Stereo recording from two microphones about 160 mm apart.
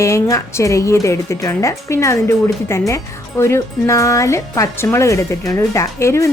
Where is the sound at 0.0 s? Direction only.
20° left (ahead or behind).